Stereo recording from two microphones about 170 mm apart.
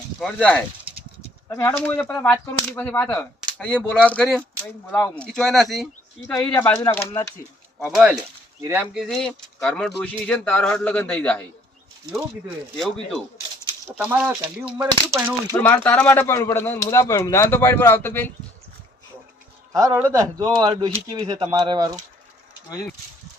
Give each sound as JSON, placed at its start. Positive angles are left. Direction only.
{"t": 0.2, "sound": "speech", "side_deg": 5}
{"t": 7.9, "sound": "a man's voice", "side_deg": -5}
{"t": 9.0, "sound": "speech", "side_deg": 5}
{"t": 12.7, "sound": "speech", "side_deg": 0}
{"t": 14.0, "sound": "a man's voice", "side_deg": -10}
{"t": 14.8, "sound": "speech", "side_deg": -20}
{"t": 15.5, "sound": "speech", "side_deg": 10}
{"t": 19.7, "sound": "a man's voice", "side_deg": -20}
{"t": 20.6, "sound": "speech", "side_deg": -30}